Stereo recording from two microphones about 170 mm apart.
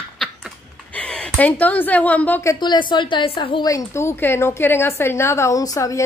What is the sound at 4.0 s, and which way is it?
A woman's voice, 15° left (ahead or behind).